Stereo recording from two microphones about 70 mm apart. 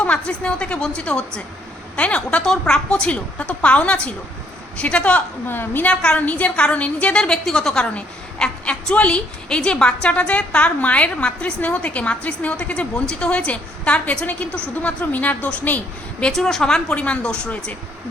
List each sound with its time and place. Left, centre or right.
0.0 s a woman's voice: centre
5.5 s a woman's voice: left
5.8 s a woman's voice: centre
16.3 s a woman's voice: centre